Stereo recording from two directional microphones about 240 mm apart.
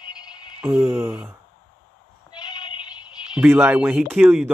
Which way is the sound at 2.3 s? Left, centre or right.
Centre.